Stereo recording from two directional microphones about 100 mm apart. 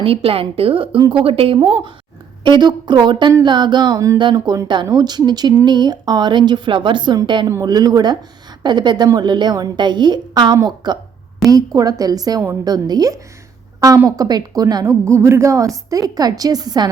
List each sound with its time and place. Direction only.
0.0 s a woman's voice: 70° right (ahead or behind)
1.5 s a woman's voice: 55° right (ahead or behind); by 4.2 s 35° right (ahead or behind)
4.2 s a woman's voice: 50° right (ahead or behind)
7.4 s a woman's voice: 35° right (ahead or behind)
15.1 s a woman's voice: 30° right (ahead or behind); by 16.9 s 45° right (ahead or behind)